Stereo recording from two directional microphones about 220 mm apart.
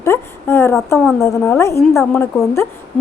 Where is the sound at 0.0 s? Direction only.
10° left (ahead or behind).